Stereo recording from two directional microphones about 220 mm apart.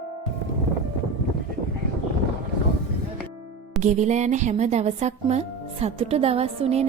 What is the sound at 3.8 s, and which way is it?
Speech, 30° right (ahead or behind).